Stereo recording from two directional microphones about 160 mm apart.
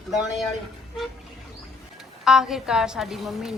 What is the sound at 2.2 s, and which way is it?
A woman's voice, centre (ahead or behind).